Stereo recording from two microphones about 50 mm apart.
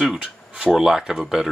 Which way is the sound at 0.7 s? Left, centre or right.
Centre.